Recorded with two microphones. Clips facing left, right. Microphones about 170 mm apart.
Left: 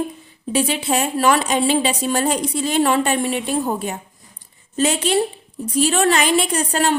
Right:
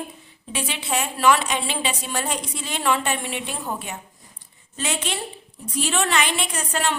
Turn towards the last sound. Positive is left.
turn(degrees=40)  # may be behind; listen again after turning